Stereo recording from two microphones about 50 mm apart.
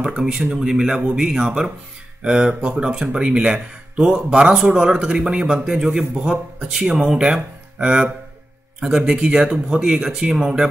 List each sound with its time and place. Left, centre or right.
0.0 s speech: centre